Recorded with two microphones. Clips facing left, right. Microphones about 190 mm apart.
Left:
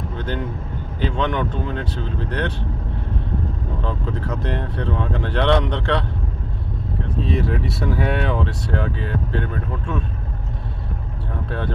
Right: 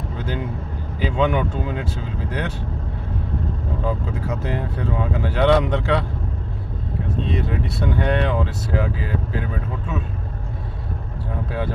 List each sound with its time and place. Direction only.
1.0 s speech: 10° right (ahead or behind)
3.8 s speech: 10° right (ahead or behind)
7.2 s speech: centre (ahead or behind)